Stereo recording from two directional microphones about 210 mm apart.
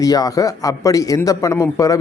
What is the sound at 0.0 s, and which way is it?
A man's voice, 15° left (ahead or behind).